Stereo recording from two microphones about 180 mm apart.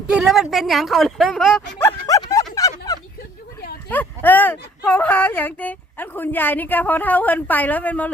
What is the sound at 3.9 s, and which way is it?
Speech, 10° left (ahead or behind).